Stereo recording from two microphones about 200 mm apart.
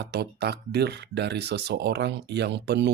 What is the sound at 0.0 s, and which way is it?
Speech, 55° right (ahead or behind).